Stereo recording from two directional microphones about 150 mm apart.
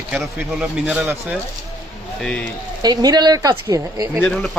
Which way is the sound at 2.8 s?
25° right (ahead or behind).